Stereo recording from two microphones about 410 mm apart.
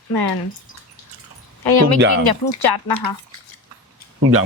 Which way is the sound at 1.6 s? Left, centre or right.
Left.